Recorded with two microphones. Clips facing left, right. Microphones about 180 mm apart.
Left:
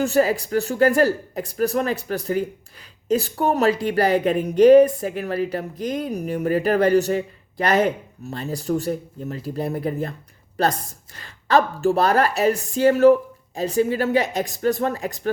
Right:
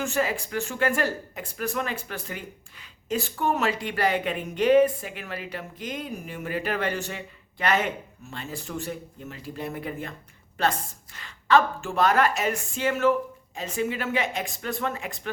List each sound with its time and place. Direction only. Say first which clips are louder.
0.0 s speech: left 8 dB; 35° left (ahead or behind)